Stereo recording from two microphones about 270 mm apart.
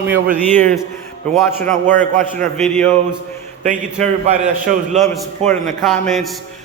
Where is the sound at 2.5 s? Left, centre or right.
Centre.